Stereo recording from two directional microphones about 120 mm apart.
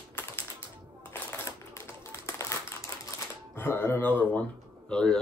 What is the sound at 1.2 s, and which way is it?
Typewriter, 20° left (ahead or behind).